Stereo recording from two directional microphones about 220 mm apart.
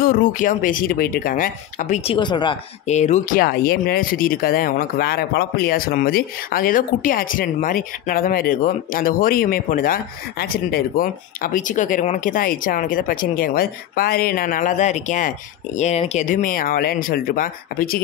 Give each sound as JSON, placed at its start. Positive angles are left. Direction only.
{"t": 0.0, "sound": "speech", "side_deg": 40}
{"t": 2.1, "sound": "speech", "side_deg": 20}
{"t": 2.9, "sound": "speech", "side_deg": 30}